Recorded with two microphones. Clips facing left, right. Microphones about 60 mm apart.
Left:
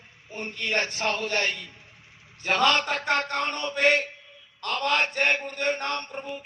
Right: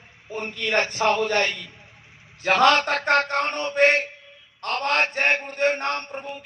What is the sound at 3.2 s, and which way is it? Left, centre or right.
Mantra, right.